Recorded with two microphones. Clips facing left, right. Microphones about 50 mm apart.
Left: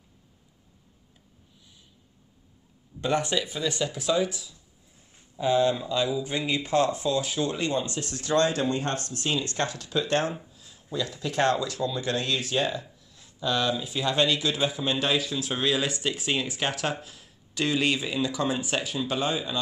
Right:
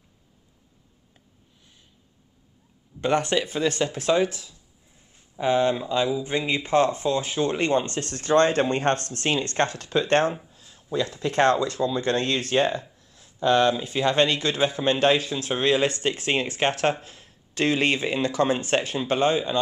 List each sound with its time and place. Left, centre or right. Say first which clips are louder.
3.0 s speech: right 3 dB; right